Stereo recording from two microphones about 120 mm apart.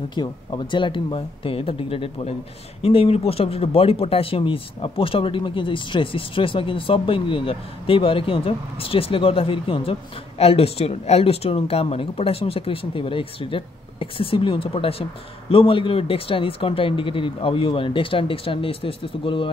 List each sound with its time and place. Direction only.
0.1 s speech: 40° left (ahead or behind)